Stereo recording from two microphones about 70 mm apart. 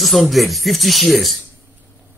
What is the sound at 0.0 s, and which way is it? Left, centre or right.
Speech, centre.